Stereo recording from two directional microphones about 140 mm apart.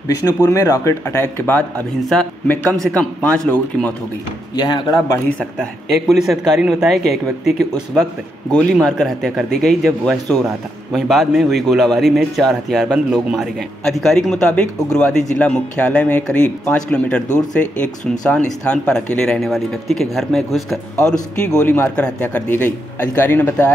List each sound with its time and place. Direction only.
0.3 s speech: 25° left (ahead or behind); by 3.9 s 10° left (ahead or behind)
4.6 s speech: 30° left (ahead or behind)
5.4 s speech: centre (ahead or behind)
21.6 s speech: 15° left (ahead or behind)